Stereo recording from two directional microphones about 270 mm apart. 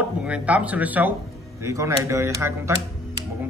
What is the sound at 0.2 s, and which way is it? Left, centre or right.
A man's voice, centre.